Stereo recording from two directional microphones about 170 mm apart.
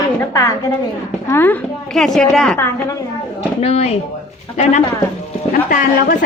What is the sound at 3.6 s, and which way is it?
Speech, 35° left (ahead or behind).